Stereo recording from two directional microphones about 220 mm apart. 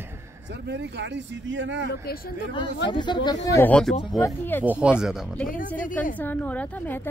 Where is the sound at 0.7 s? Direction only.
50° right (ahead or behind).